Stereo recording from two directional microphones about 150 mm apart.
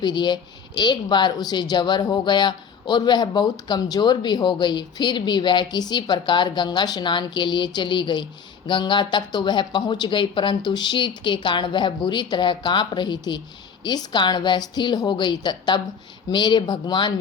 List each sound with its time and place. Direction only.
0.0 s speech: 30° left (ahead or behind)